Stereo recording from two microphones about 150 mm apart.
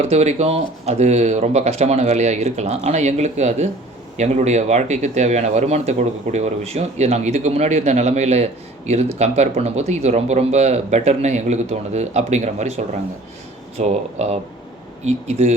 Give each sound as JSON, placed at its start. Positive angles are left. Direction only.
{"t": 0.0, "sound": "speech", "side_deg": -45}